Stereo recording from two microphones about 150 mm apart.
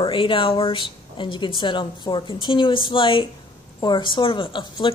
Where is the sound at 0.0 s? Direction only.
35° left (ahead or behind).